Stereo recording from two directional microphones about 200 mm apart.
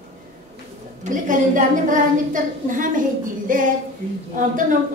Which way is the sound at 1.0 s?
40° right (ahead or behind).